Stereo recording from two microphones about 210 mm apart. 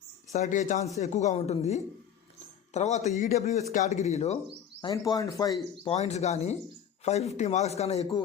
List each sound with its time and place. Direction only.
0.3 s a man's voice: 35° left (ahead or behind)
4.8 s speech: 15° left (ahead or behind)
5.8 s a man's voice: 30° left (ahead or behind)